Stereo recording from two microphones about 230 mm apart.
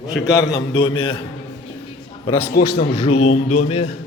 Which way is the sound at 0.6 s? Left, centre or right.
Centre.